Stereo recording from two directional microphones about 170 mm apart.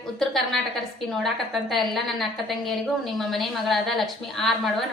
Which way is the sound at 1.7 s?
Centre (ahead or behind).